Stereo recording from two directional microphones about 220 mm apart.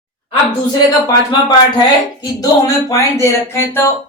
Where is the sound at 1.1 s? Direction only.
20° left (ahead or behind).